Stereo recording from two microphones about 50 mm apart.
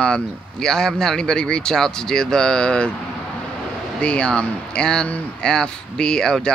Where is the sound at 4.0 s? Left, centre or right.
Left.